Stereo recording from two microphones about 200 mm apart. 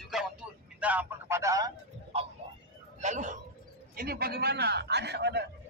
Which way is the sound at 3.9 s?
50° right (ahead or behind).